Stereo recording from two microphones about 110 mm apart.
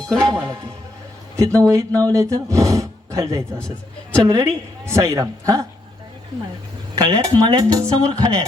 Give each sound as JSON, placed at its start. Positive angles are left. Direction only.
{"t": 0.1, "sound": "speech", "side_deg": 5}
{"t": 0.3, "sound": "speech", "side_deg": -25}
{"t": 6.9, "sound": "speech", "side_deg": -40}